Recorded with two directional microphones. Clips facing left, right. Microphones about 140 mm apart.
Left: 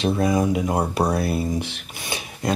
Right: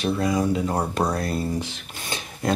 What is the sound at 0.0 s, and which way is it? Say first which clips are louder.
Speech: left 2 dB; 15° left (ahead or behind).